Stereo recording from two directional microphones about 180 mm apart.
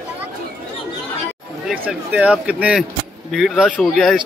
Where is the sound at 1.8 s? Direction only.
5° right (ahead or behind).